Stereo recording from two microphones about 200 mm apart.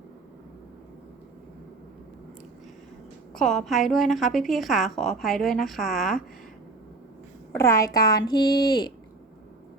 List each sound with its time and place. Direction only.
3.3 s a woman's voice: centre (ahead or behind)
7.5 s a woman's voice: 15° left (ahead or behind)